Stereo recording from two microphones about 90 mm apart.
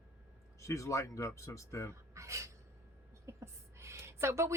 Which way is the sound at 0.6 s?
35° left (ahead or behind).